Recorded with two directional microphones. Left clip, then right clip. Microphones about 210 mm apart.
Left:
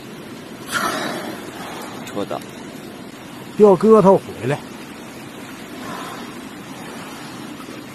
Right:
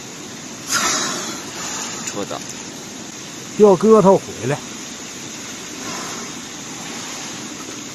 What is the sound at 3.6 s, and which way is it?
Speech, centre (ahead or behind).